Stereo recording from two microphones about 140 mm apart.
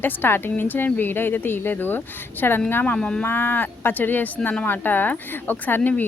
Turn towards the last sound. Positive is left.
turn(degrees=15)  # may be behind; listen again after turning